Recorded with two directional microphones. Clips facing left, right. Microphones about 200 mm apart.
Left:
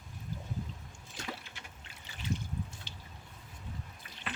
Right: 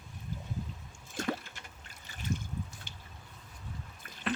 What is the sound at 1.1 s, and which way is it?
Trickle, 50° right (ahead or behind).